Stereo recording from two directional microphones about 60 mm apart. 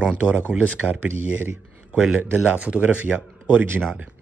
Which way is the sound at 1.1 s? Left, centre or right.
Right.